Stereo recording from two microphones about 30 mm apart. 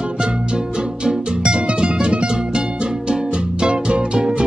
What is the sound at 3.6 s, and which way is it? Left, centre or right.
Music, right.